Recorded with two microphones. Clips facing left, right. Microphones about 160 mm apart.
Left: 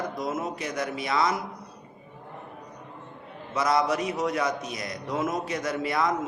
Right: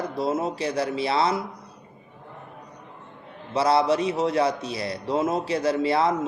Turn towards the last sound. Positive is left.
turn(degrees=-30)  # may be behind; listen again after turning